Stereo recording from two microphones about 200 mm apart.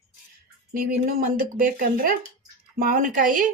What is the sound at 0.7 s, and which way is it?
Speech, 45° right (ahead or behind).